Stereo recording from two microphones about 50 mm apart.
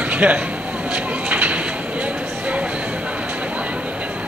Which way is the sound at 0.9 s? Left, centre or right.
Right.